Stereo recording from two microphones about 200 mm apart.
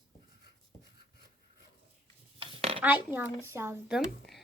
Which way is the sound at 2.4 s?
25° right (ahead or behind).